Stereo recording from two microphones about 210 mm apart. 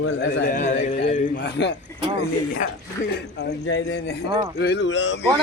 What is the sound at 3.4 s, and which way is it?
Speech, 55° left (ahead or behind).